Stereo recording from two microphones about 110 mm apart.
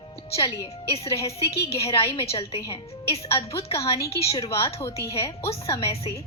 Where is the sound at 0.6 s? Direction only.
60° left (ahead or behind).